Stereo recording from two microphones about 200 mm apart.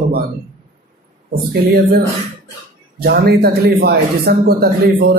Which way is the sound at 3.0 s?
55° right (ahead or behind).